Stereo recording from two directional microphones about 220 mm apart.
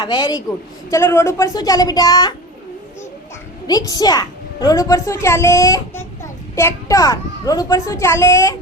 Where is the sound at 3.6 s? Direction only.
15° left (ahead or behind).